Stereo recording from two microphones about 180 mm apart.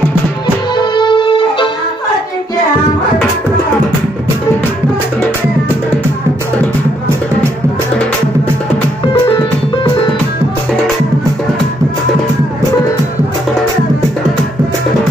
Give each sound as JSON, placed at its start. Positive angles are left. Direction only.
{"t": 0.7, "sound": "music", "side_deg": 25}